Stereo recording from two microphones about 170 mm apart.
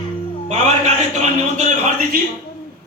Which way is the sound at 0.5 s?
40° right (ahead or behind).